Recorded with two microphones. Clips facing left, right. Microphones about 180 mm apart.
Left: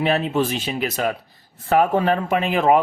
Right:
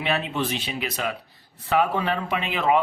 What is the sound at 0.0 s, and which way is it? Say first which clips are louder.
Speech: left 6 dB; 45° left (ahead or behind).